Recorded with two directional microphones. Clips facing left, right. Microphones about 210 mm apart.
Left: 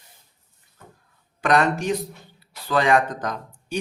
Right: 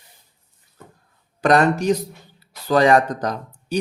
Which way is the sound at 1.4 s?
40° right (ahead or behind).